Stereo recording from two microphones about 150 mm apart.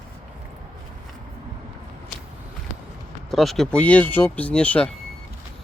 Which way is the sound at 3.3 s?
Centre (ahead or behind).